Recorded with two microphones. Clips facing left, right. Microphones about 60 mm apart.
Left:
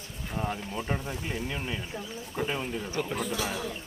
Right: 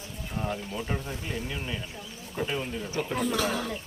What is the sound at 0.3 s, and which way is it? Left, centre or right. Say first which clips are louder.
Speech: even; centre.